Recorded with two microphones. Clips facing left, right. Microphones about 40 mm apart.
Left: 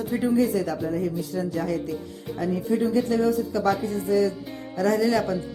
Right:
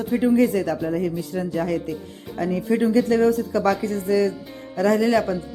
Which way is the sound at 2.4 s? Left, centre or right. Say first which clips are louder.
Right 3 dB; right.